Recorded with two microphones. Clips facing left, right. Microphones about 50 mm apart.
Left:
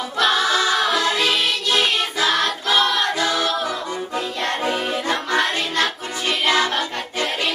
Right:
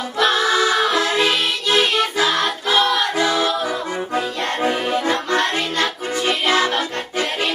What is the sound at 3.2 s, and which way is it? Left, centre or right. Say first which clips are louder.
Music: right 3 dB; right.